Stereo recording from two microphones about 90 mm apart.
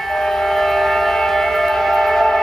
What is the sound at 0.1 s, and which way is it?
Train, 5° left (ahead or behind).